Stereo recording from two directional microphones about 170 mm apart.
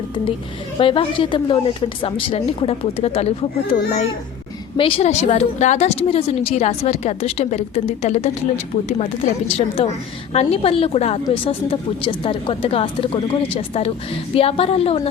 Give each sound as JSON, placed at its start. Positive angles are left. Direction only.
{"t": 0.8, "sound": "a woman's voice", "side_deg": 30}
{"t": 4.8, "sound": "a woman's voice", "side_deg": 35}